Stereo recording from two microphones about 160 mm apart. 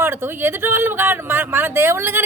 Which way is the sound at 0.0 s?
15° right (ahead or behind).